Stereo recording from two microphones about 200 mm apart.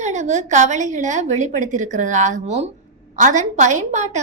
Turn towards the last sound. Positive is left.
turn(degrees=-35)  # may be behind; listen again after turning